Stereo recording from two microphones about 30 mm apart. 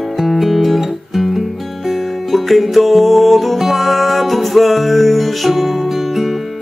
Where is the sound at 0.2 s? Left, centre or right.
Centre.